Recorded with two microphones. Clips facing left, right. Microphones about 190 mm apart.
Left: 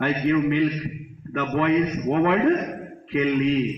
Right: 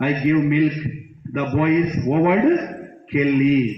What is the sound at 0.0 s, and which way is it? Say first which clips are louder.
A man's voice: right 3 dB; 10° right (ahead or behind).